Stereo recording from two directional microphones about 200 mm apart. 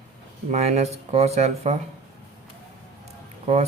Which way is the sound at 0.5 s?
35° right (ahead or behind).